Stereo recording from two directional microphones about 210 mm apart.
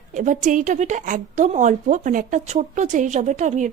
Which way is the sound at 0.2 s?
35° right (ahead or behind).